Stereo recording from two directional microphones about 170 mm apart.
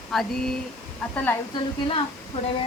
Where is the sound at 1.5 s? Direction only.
30° left (ahead or behind).